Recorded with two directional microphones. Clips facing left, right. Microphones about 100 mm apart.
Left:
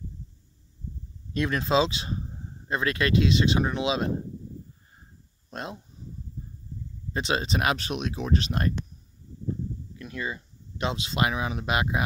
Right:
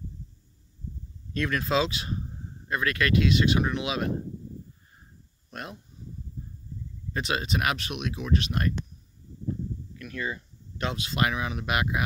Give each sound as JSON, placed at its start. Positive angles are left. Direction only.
{"t": 1.3, "sound": "speech", "side_deg": 20}
{"t": 5.5, "sound": "speech", "side_deg": 25}
{"t": 7.2, "sound": "speech", "side_deg": 25}
{"t": 9.9, "sound": "speech", "side_deg": 20}